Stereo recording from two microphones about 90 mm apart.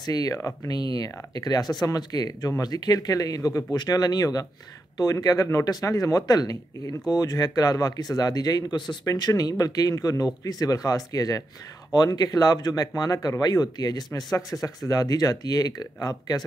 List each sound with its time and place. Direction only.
0.0 s speech: 45° left (ahead or behind)
9.0 s speech: 40° left (ahead or behind)